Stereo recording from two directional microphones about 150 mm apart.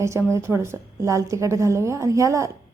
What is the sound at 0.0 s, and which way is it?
A woman's voice, 20° right (ahead or behind).